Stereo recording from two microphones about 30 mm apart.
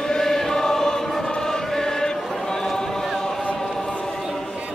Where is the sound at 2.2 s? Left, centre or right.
Centre.